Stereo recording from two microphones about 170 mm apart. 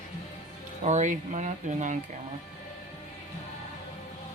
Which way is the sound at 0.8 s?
45° right (ahead or behind).